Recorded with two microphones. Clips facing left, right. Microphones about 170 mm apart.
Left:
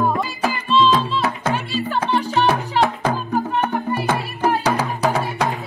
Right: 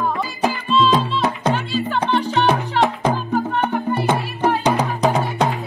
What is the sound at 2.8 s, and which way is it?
Music, 15° right (ahead or behind).